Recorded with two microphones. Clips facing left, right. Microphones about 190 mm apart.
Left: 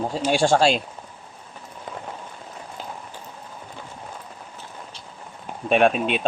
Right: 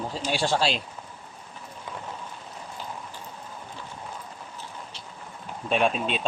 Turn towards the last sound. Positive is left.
turn(degrees=65)  # may be behind; listen again after turning